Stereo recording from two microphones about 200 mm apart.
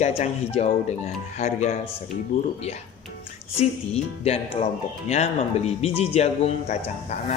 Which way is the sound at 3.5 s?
30° left (ahead or behind).